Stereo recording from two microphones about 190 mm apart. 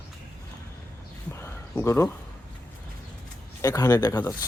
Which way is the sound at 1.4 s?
15° left (ahead or behind).